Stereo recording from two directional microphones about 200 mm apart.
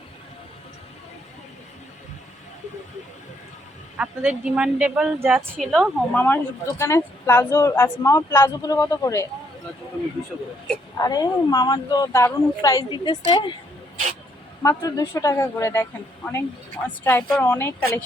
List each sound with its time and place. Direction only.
3.9 s speech: 5° right (ahead or behind); by 9.2 s 15° left (ahead or behind)
10.9 s speech: 20° left (ahead or behind)
14.6 s speech: 15° left (ahead or behind)